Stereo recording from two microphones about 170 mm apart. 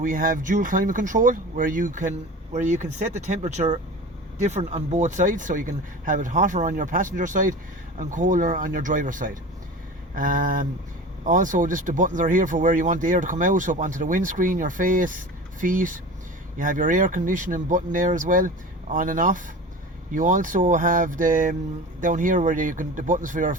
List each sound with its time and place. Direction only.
0.0 s speech: 55° right (ahead or behind)